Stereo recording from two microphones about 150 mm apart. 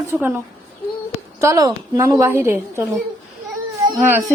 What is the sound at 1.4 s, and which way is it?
A woman's voice, 20° right (ahead or behind).